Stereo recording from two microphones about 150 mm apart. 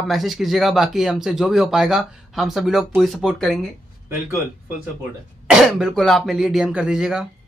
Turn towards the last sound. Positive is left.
turn(degrees=-5)  # may be behind; listen again after turning